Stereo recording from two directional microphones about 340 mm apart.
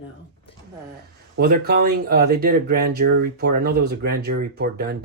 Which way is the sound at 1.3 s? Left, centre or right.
Right.